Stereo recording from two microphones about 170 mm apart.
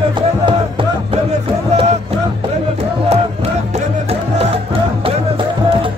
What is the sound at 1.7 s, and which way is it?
Music, 40° right (ahead or behind).